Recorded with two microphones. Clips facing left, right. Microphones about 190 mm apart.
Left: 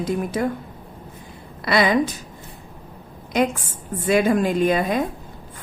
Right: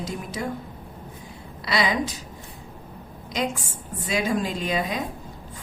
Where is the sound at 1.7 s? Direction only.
55° left (ahead or behind).